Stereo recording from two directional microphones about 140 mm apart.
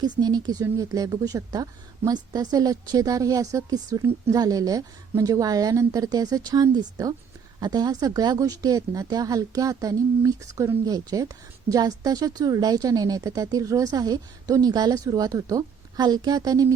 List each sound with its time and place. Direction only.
0.0 s speech: 30° right (ahead or behind)